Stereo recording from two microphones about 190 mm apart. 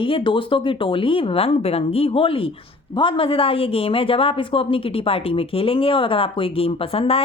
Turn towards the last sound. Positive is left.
turn(degrees=30)  # may be behind; listen again after turning